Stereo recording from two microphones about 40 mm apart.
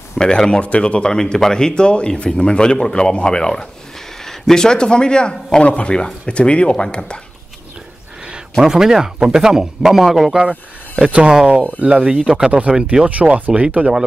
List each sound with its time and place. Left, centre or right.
0.2 s speech: centre
0.6 s speech: left
8.5 s a man's voice: centre
10.3 s speech: right
11.2 s a man's voice: centre
11.8 s speech: right